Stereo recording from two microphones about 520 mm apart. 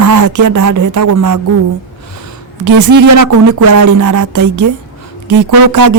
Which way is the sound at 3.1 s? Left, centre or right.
Right.